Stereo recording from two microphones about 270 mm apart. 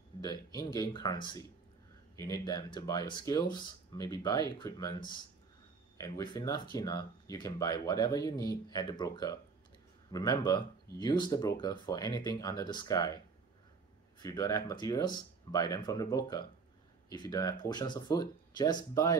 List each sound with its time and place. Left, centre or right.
0.1 s a sound: centre
0.6 s speech: centre
14.2 s speech: centre